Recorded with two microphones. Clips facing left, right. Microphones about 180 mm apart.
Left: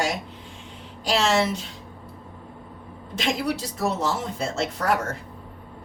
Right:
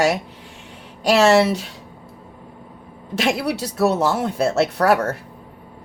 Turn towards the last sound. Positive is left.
turn(degrees=-70)  # may be behind; listen again after turning